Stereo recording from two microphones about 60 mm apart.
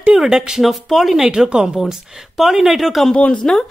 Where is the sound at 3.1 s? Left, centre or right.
Left.